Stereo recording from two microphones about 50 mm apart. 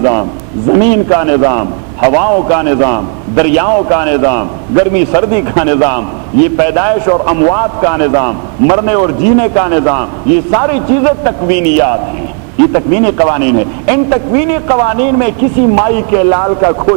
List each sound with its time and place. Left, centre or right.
0.0 s a man's voice: left